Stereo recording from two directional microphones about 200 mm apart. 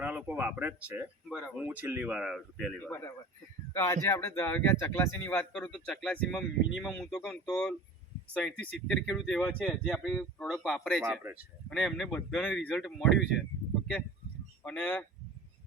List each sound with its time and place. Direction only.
0.0 s speech: 5° right (ahead or behind)
2.8 s speech: 10° left (ahead or behind)
11.0 s speech: 10° right (ahead or behind)
11.7 s speech: centre (ahead or behind)
14.6 s speech: 5° left (ahead or behind)